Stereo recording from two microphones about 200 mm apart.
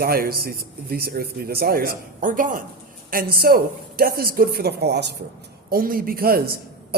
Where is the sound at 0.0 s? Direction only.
50° right (ahead or behind).